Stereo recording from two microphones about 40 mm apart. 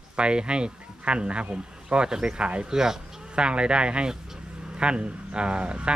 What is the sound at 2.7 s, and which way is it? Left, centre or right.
Speech, centre.